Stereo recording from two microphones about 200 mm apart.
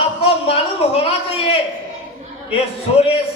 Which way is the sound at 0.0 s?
30° left (ahead or behind).